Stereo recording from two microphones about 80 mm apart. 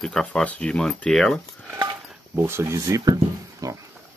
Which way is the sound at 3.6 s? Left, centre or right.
Right.